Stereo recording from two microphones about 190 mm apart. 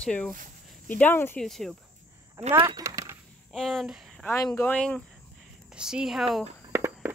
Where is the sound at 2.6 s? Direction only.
25° right (ahead or behind).